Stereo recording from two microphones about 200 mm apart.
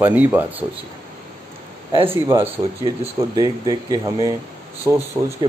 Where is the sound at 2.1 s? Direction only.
10° right (ahead or behind).